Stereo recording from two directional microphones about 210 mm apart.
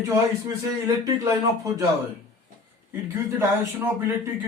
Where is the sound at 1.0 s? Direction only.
15° right (ahead or behind).